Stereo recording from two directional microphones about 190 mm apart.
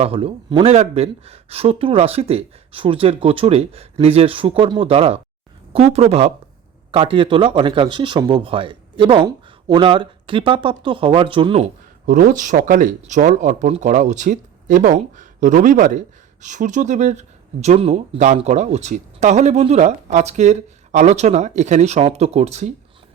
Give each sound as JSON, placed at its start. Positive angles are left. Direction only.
{"t": 0.0, "sound": "speech", "side_deg": -30}
{"t": 12.0, "sound": "speech", "side_deg": -45}